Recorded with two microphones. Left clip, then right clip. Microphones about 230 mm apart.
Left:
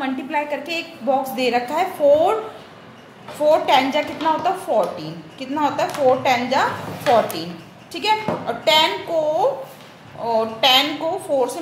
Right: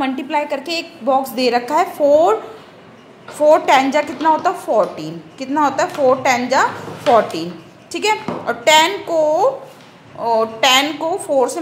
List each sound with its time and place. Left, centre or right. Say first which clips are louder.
0.0 s a woman's voice: right 4 dB; right
3.4 s a woman's voice: right 4 dB; right
7.9 s a woman's voice: right 2 dB; right